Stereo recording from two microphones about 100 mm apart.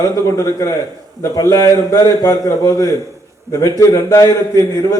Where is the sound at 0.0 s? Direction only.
35° left (ahead or behind).